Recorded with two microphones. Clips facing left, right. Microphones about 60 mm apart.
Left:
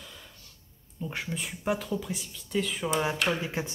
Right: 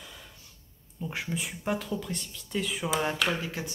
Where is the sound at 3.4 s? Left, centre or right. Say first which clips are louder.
Left 3 dB; left.